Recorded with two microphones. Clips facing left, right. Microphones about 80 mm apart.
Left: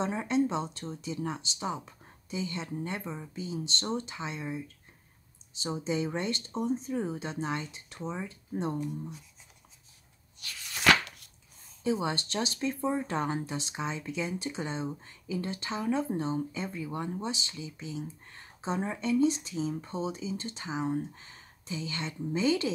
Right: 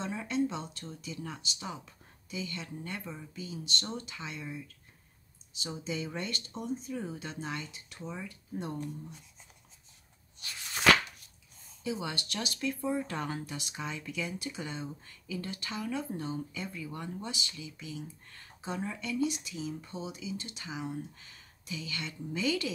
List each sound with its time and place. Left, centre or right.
0.0 s speech: left
10.4 s shuffling cards: centre
11.8 s speech: left